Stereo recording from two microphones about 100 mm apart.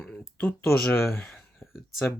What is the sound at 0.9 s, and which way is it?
Speech, 25° left (ahead or behind).